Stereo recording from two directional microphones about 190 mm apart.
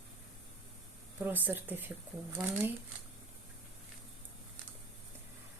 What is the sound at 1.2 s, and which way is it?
Speech, 10° right (ahead or behind).